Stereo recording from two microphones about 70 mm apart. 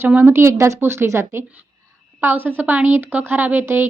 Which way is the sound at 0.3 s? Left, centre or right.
Right.